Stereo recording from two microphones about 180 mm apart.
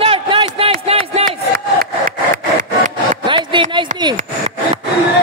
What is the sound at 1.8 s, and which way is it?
Wood, 50° right (ahead or behind).